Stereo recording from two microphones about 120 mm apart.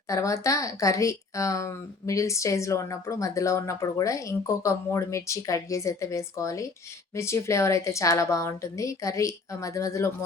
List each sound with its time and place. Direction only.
0.1 s speech: 25° left (ahead or behind)